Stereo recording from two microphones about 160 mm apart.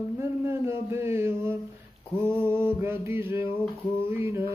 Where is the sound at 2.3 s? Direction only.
15° right (ahead or behind).